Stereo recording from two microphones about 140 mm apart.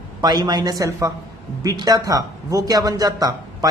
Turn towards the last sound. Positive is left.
turn(degrees=-25)  # may be behind; listen again after turning